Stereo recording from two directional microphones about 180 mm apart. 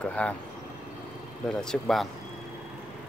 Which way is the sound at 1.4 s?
5° left (ahead or behind).